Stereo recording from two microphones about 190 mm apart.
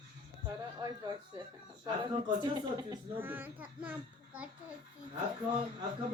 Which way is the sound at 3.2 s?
10° right (ahead or behind).